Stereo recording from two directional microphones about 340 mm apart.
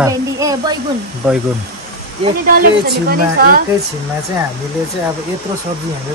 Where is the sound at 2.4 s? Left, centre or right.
Right.